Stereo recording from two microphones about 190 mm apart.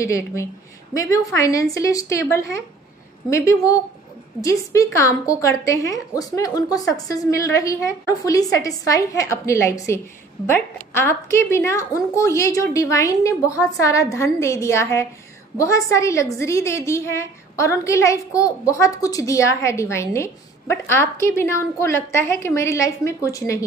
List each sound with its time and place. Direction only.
0.0 s a woman's voice: 15° left (ahead or behind)